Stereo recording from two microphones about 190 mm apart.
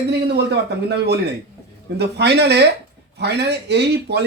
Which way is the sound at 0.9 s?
60° right (ahead or behind).